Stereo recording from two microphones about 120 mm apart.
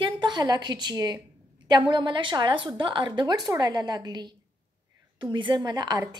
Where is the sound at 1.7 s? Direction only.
40° right (ahead or behind).